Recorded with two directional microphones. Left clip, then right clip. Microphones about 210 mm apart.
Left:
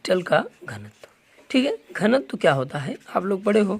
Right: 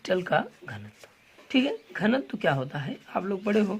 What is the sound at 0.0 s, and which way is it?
Speech, 25° left (ahead or behind).